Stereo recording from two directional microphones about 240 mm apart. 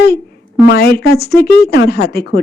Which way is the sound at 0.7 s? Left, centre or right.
Left.